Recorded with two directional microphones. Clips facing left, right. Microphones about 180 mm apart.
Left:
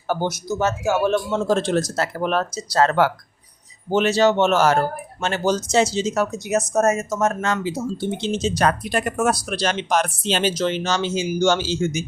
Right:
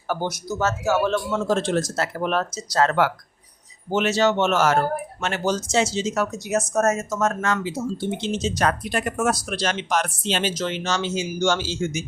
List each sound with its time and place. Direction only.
0.1 s speech: 25° left (ahead or behind)
1.3 s speech: 35° left (ahead or behind)
6.5 s speech: 20° left (ahead or behind)
8.2 s speech: 35° left (ahead or behind)